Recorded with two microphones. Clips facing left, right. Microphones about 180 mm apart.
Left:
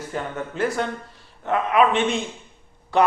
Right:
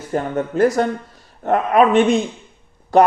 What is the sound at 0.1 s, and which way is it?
Speech, 40° right (ahead or behind).